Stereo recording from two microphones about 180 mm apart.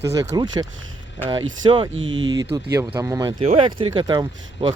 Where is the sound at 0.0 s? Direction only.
20° right (ahead or behind).